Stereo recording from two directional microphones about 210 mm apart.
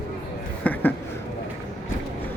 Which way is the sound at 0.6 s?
10° left (ahead or behind).